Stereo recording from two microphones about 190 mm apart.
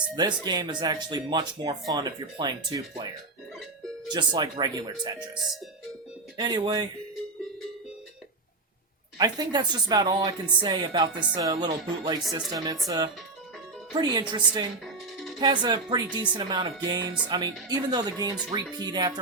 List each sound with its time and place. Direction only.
0.2 s speech: 20° right (ahead or behind)
4.1 s speech: 25° right (ahead or behind)
9.1 s speech: 20° right (ahead or behind)
13.9 s speech: 20° right (ahead or behind)